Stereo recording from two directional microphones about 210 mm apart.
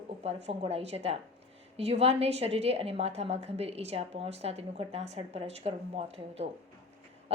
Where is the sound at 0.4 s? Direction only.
30° right (ahead or behind).